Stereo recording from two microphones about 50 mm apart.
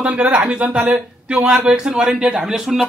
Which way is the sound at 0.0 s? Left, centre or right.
Right.